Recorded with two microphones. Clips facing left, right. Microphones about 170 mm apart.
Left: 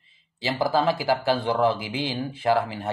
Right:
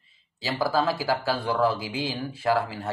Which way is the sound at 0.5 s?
20° left (ahead or behind).